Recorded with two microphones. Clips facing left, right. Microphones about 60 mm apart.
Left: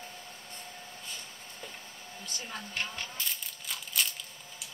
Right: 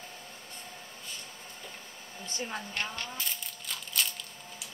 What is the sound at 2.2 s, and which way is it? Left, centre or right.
Speech, right.